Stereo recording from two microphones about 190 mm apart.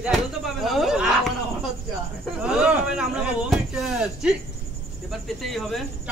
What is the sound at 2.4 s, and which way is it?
Speech, 5° right (ahead or behind).